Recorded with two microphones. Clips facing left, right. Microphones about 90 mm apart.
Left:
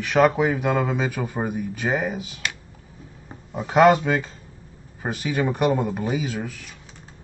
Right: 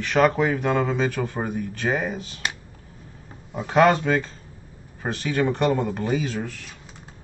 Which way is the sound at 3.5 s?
10° left (ahead or behind).